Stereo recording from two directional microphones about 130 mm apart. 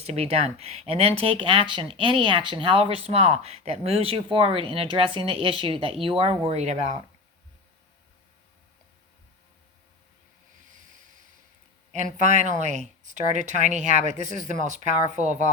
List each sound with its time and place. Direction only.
0.0 s speech: 55° right (ahead or behind)
11.9 s speech: 70° right (ahead or behind)